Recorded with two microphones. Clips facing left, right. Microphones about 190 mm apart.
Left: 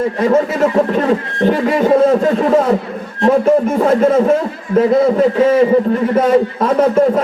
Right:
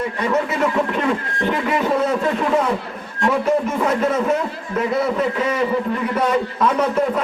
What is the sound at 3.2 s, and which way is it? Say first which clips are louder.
Music: left 7 dB; 35° left (ahead or behind).